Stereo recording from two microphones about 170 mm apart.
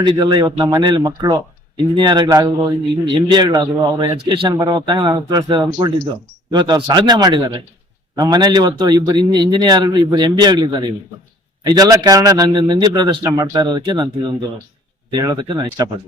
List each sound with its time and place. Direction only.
0.0 s a man's voice: 25° right (ahead or behind)